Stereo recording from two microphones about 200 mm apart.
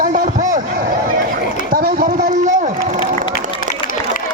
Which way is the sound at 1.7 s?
45° right (ahead or behind).